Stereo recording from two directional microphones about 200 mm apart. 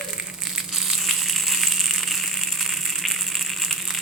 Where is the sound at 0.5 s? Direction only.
Centre (ahead or behind).